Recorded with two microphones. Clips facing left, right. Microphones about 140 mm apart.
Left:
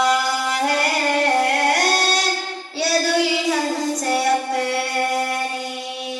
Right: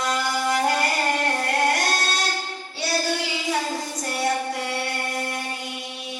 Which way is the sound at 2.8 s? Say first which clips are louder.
Left 7 dB; 80° left.